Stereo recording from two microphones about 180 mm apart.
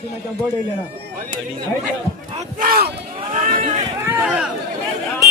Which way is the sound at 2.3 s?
50° right (ahead or behind).